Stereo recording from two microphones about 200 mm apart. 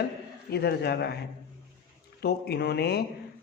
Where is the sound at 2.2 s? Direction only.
55° left (ahead or behind).